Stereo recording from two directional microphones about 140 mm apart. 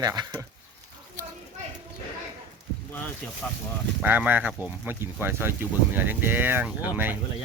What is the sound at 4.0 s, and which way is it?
Speech, 10° right (ahead or behind).